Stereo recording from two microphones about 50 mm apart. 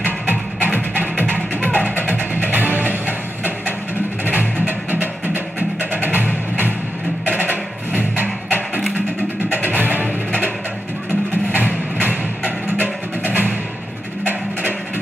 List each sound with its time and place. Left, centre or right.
0.0 s music: right
7.9 s music: right
11.5 s music: right